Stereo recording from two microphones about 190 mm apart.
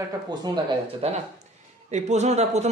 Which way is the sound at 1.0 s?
30° right (ahead or behind).